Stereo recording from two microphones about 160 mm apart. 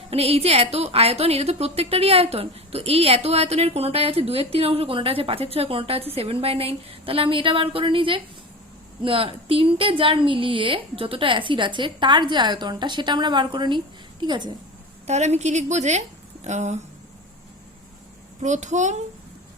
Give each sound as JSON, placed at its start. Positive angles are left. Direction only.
{"t": 0.1, "sound": "a woman's voice", "side_deg": -40}
{"t": 15.0, "sound": "a woman's voice", "side_deg": -45}
{"t": 18.4, "sound": "a child's voice", "side_deg": -50}